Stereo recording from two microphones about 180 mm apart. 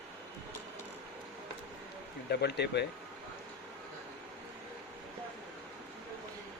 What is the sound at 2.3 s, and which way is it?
Speech, 65° left (ahead or behind).